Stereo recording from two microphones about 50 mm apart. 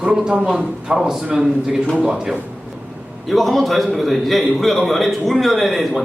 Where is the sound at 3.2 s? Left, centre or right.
Centre.